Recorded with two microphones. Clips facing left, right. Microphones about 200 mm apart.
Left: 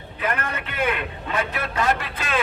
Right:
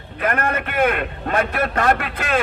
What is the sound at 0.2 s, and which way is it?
A man's voice, 55° right (ahead or behind).